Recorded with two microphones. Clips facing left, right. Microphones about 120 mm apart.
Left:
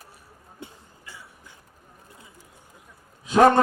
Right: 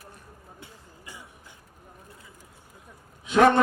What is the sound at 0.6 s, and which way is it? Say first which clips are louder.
Speech: left 8 dB; 20° left (ahead or behind).